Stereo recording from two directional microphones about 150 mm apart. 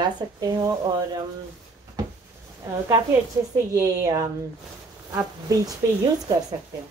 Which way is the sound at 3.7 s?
20° right (ahead or behind).